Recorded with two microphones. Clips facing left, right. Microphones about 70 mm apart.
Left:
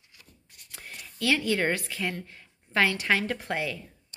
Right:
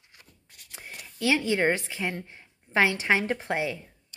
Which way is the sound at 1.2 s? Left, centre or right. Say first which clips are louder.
Right 2 dB; centre.